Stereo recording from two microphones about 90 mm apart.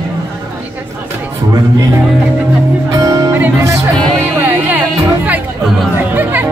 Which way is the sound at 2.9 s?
40° right (ahead or behind).